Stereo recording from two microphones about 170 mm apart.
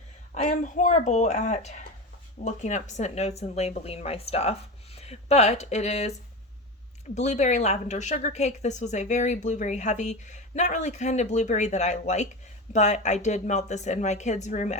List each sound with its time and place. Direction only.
0.3 s speech: 45° left (ahead or behind)
7.2 s a woman's voice: 40° left (ahead or behind)